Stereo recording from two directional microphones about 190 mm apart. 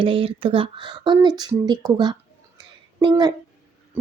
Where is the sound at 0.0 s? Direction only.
30° right (ahead or behind).